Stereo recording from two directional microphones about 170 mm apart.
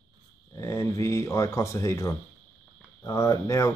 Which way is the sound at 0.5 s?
15° left (ahead or behind).